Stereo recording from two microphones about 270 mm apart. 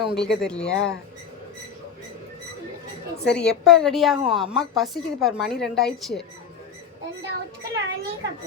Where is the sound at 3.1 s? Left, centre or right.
Left.